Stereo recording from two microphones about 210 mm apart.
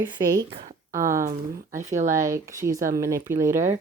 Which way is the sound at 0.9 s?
15° right (ahead or behind).